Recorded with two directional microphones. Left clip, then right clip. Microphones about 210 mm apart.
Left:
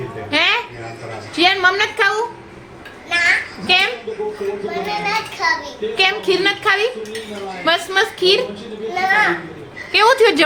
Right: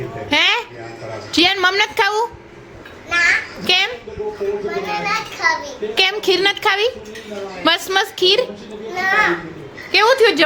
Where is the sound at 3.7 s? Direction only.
45° right (ahead or behind).